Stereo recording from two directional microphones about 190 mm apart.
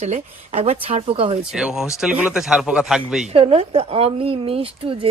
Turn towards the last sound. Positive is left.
turn(degrees=-30)  # may be behind; listen again after turning